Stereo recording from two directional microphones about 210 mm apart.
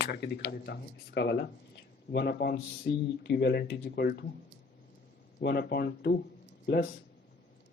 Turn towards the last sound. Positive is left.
turn(degrees=55)  # may be behind; listen again after turning